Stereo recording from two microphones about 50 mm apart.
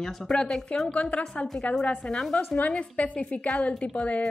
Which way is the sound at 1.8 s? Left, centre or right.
Centre.